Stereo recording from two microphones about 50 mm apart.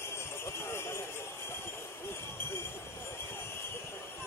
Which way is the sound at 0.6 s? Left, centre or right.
Left.